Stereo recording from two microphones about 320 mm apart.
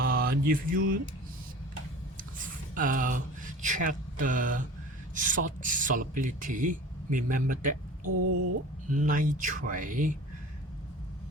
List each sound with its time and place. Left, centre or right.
0.0 s mantra: right
2.1 s a sound: right
5.1 s speech: right
9.0 s speech: right